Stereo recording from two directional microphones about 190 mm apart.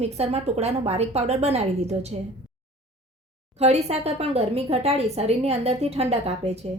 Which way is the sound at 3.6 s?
35° right (ahead or behind).